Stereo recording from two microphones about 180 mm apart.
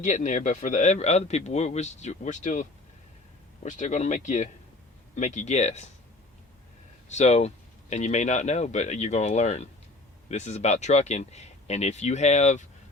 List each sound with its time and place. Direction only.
0.0 s a man's voice: 40° left (ahead or behind)
7.1 s a man's voice: 40° left (ahead or behind)